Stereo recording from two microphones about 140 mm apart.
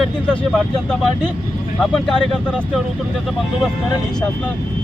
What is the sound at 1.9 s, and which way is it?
Speech, 5° left (ahead or behind).